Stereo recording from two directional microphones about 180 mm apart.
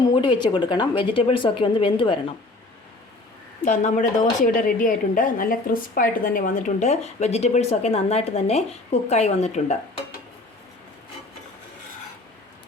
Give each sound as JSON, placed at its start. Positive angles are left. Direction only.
{"t": 0.1, "sound": "speech", "side_deg": 25}
{"t": 3.6, "sound": "a woman's voice", "side_deg": 45}